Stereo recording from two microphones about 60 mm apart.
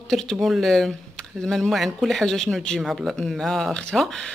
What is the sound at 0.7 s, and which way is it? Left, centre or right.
Speech, centre.